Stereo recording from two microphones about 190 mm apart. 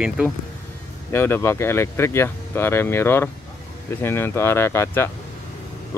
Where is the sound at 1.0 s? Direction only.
10° left (ahead or behind).